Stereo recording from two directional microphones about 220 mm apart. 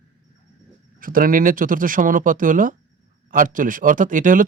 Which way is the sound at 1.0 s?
40° right (ahead or behind).